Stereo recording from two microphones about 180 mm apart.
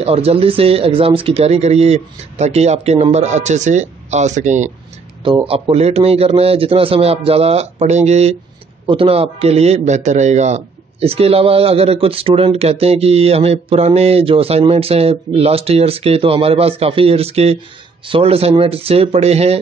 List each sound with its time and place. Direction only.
0.0 s a man's voice: 35° right (ahead or behind)